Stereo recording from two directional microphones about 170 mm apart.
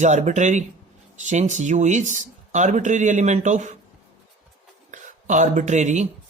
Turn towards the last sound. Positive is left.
turn(degrees=-45)  # may be behind; listen again after turning